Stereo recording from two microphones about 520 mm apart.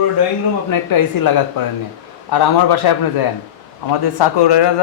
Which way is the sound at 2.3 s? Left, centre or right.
Left.